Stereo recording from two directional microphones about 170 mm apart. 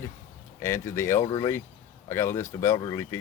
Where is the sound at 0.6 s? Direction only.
15° left (ahead or behind).